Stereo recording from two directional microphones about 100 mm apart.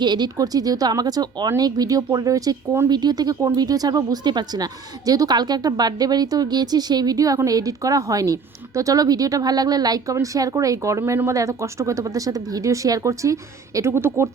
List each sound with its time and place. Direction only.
0.0 s speech: 45° right (ahead or behind); by 14.3 s 25° right (ahead or behind)